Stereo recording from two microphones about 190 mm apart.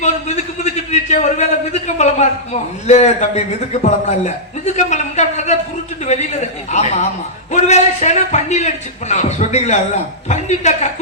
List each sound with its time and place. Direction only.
0.0 s a man's voice: 35° left (ahead or behind)